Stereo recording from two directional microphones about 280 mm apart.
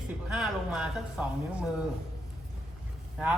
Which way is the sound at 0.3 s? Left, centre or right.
Centre.